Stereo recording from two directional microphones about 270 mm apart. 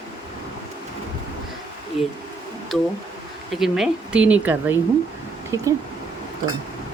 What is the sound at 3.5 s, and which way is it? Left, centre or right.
Speech, centre.